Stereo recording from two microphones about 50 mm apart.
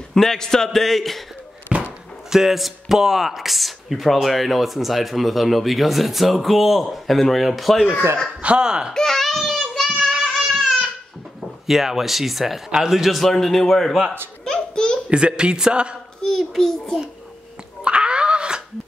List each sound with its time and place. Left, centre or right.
0.1 s a child's voice: centre
1.7 s basketball bounce: right
2.2 s speech: centre
8.4 s speech: right
8.9 s child singing: centre
10.2 s a sound: centre
11.6 s speech: centre
14.4 s a sound: centre
15.0 s a man's voice: right
16.3 s a child's voice: centre
17.8 s a sound: right